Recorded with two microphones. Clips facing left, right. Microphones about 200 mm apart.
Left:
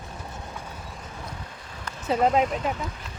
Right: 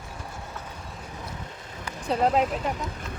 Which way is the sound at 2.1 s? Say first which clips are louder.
Left 1 dB; centre (ahead or behind).